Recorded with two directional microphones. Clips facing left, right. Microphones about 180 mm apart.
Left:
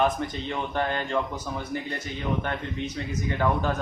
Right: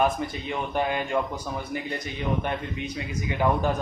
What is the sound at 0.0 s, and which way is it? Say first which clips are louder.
Speech: even; 10° right (ahead or behind).